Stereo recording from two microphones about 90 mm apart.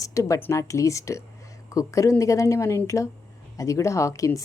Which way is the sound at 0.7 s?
35° left (ahead or behind).